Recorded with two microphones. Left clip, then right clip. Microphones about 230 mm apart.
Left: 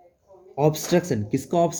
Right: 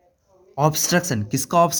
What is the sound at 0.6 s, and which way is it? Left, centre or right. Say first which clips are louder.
Speech: right 2 dB; right.